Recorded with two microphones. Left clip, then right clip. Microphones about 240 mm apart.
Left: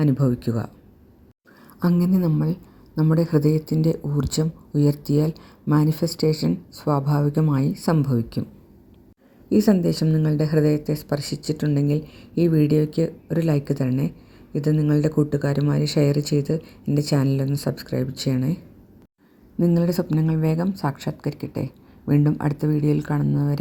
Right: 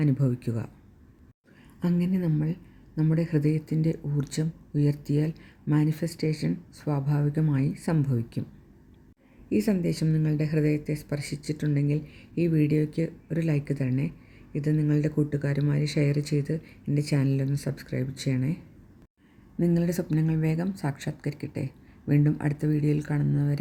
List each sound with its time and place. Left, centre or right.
0.0 s speech: centre
1.8 s a woman's voice: centre
9.5 s speech: centre